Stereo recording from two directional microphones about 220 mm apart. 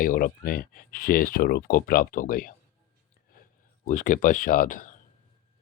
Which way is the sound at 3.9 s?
35° left (ahead or behind).